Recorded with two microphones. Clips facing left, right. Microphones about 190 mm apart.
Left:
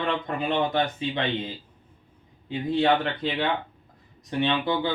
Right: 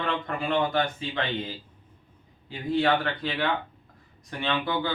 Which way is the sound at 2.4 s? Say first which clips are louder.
Left 2 dB; 25° left (ahead or behind).